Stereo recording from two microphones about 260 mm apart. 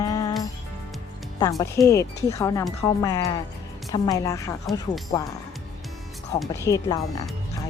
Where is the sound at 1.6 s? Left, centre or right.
Centre.